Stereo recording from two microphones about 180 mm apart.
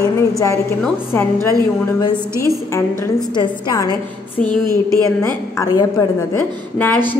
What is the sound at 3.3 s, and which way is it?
Speech, 25° left (ahead or behind).